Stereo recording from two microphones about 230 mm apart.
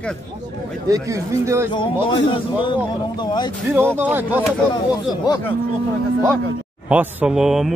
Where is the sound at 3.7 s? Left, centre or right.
Centre.